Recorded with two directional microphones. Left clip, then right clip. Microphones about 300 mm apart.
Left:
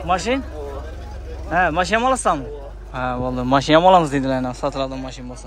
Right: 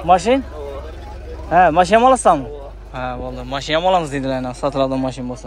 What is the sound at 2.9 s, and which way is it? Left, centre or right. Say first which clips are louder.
A man's voice: left 2 dB; centre.